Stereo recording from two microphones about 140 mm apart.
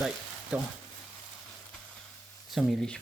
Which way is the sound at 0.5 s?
10° right (ahead or behind).